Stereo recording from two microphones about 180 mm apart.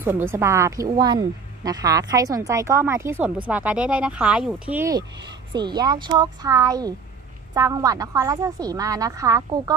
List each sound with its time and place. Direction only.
0.0 s a woman's voice: 15° right (ahead or behind)